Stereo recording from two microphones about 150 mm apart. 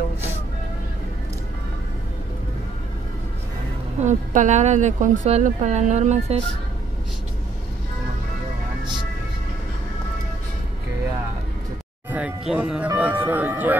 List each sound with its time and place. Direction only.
4.0 s a woman's voice: 55° right (ahead or behind)
12.1 s speech: 10° right (ahead or behind)